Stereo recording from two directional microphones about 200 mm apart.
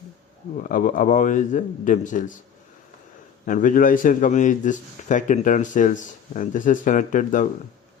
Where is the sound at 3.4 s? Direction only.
40° left (ahead or behind).